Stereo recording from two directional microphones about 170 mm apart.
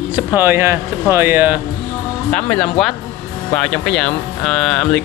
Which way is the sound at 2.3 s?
5° left (ahead or behind).